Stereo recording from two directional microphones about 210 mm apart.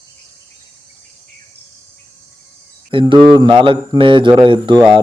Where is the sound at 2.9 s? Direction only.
25° right (ahead or behind).